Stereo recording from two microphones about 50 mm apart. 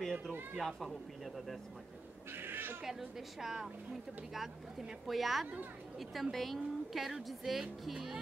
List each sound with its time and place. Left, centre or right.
0.0 s a sound: centre
0.6 s speech: centre
2.3 s speech: right
2.8 s a woman's voice: centre